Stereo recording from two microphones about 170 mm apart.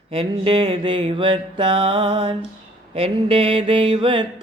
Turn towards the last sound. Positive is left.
turn(degrees=-30)  # may be behind; listen again after turning